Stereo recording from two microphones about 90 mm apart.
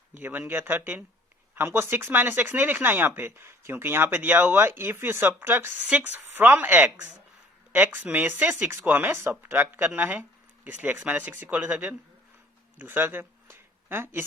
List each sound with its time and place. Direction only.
0.2 s speech: 20° right (ahead or behind)